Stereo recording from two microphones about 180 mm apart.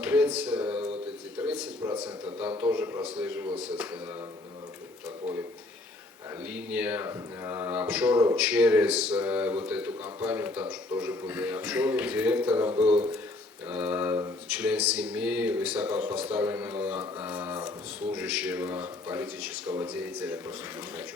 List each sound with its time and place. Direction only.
0.0 s a sound: 10° right (ahead or behind)
1.8 s a man's voice: 20° right (ahead or behind)
2.4 s a man's voice: 10° right (ahead or behind)
6.5 s a man's voice: 10° right (ahead or behind)